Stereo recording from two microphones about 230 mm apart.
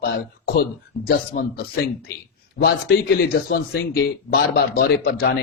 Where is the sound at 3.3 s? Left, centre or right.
Left.